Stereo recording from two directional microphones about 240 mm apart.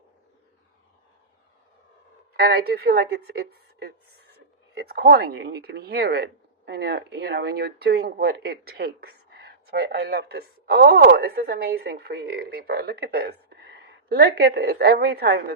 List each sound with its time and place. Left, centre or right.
2.3 s a woman's voice: right